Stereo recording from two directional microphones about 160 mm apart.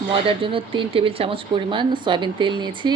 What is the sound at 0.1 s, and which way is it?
A woman's voice, 35° right (ahead or behind).